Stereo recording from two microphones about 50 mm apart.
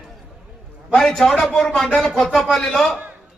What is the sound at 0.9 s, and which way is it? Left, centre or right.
A man's voice, centre.